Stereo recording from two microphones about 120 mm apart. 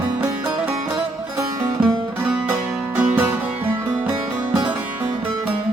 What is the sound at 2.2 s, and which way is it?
Music, 10° right (ahead or behind).